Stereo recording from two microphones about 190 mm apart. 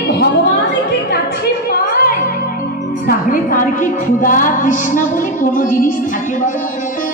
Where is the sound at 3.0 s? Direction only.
45° left (ahead or behind).